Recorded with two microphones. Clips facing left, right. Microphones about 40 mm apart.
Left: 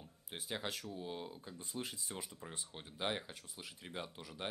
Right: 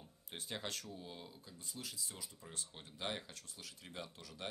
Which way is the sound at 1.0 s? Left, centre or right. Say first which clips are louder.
Left 7 dB; left.